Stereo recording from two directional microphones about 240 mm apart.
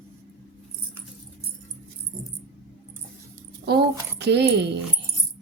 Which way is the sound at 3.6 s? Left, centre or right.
Right.